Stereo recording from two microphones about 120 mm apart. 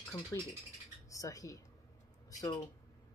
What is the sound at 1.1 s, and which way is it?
Speech, 30° left (ahead or behind).